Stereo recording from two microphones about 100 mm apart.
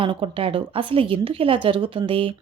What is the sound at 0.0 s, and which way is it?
A woman's voice, 60° right (ahead or behind).